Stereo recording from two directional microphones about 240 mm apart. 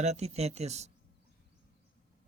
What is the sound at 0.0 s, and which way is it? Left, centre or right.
Speech, right.